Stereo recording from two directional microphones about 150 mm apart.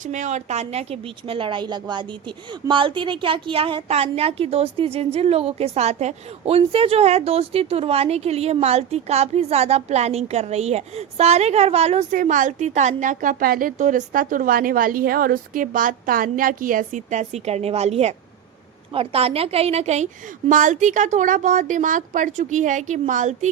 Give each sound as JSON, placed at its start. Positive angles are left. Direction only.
{"t": 0.0, "sound": "a woman's voice", "side_deg": -55}
{"t": 12.1, "sound": "a woman's voice", "side_deg": -65}
{"t": 20.5, "sound": "a woman's voice", "side_deg": -60}